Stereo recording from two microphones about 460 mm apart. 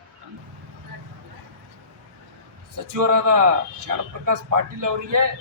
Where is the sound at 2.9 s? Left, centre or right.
Right.